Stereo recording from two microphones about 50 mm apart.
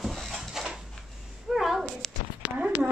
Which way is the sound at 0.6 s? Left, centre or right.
Centre.